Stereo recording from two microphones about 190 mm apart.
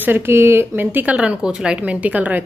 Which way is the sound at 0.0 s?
10° right (ahead or behind).